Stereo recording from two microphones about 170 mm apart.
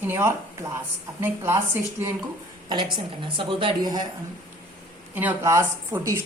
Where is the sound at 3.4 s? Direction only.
30° right (ahead or behind).